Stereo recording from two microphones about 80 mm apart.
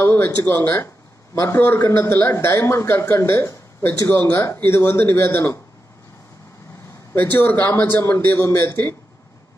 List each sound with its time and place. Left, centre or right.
0.0 s a man's voice: left
7.3 s a man's voice: left